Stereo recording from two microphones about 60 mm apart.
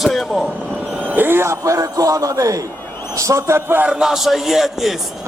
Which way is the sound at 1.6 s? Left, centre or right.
Right.